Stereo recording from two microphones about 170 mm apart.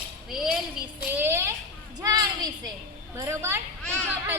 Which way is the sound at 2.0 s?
20° right (ahead or behind).